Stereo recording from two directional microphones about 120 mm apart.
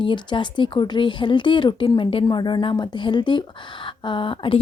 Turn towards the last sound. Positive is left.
turn(degrees=45)  # may be behind; listen again after turning